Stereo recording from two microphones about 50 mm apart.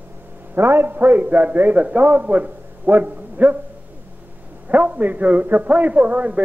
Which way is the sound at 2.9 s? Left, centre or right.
Right.